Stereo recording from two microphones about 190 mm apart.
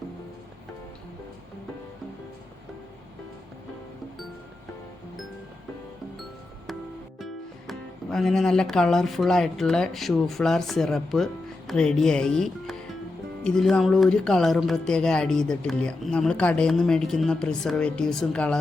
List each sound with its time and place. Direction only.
7.7 s speech: centre (ahead or behind)